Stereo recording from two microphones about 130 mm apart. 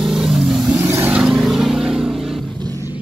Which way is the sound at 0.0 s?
5° right (ahead or behind).